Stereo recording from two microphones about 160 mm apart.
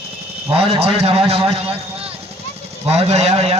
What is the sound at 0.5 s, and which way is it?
Speech, 35° right (ahead or behind).